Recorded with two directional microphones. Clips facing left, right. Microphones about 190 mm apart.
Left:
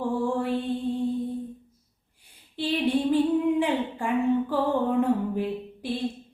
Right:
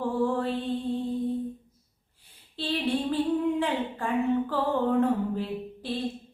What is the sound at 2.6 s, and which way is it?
Female singing, 15° left (ahead or behind).